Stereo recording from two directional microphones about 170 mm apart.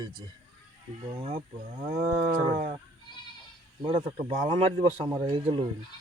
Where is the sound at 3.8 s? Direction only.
30° right (ahead or behind).